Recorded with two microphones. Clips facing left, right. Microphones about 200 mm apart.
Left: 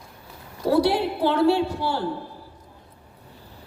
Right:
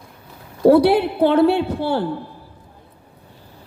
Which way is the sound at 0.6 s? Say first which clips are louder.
Right 8 dB; 60° right (ahead or behind).